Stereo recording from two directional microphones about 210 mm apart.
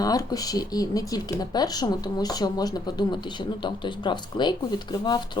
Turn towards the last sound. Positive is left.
turn(degrees=20)  # may be behind; listen again after turning